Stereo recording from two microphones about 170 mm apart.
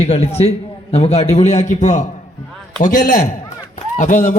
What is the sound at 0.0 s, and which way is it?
A man's voice, 40° left (ahead or behind).